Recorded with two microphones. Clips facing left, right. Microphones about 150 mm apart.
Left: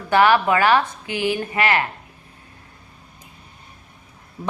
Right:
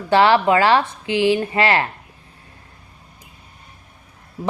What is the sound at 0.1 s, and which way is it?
Speech, 25° right (ahead or behind).